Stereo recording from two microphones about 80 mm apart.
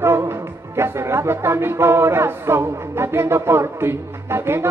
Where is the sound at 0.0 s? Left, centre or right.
Right.